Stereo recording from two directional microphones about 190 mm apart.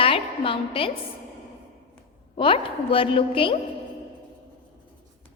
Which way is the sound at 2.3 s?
30° left (ahead or behind).